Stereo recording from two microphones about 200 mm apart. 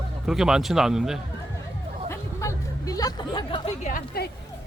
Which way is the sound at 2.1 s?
15° left (ahead or behind).